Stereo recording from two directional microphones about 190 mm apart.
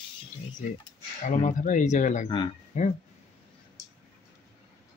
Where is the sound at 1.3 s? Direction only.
40° left (ahead or behind).